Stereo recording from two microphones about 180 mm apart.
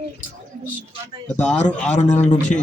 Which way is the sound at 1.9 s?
40° left (ahead or behind).